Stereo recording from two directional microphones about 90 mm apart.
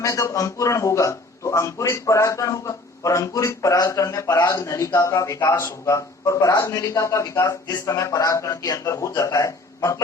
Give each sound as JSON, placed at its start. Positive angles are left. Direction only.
{"t": 0.0, "sound": "a man's voice", "side_deg": 35}